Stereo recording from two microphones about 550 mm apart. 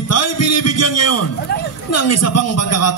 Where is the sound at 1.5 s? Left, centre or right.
Centre.